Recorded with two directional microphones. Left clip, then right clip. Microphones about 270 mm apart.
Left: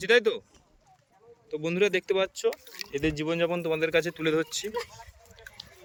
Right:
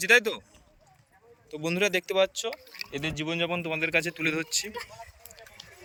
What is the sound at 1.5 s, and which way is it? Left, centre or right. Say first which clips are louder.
Speech: left 1 dB; centre.